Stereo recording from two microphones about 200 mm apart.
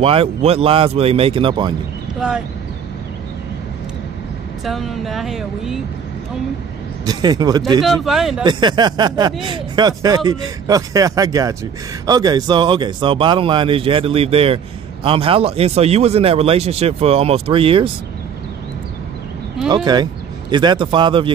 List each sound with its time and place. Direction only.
0.0 s speech: 30° right (ahead or behind)
2.1 s speech: 5° right (ahead or behind)
4.6 s speech: centre (ahead or behind)
7.1 s speech: 20° right (ahead or behind)
7.8 s speech: centre (ahead or behind)
8.5 s speech: 20° right (ahead or behind)
19.7 s speech: 20° right (ahead or behind)